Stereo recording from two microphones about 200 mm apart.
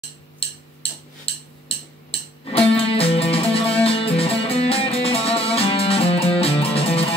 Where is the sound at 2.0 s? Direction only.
30° left (ahead or behind).